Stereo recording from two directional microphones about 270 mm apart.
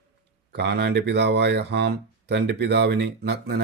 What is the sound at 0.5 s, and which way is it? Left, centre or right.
Speech, right.